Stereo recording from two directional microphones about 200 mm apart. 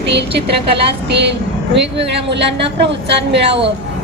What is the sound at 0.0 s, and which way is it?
Speech, 60° right (ahead or behind).